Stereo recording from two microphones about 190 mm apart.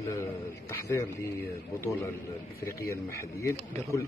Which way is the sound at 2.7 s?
15° left (ahead or behind).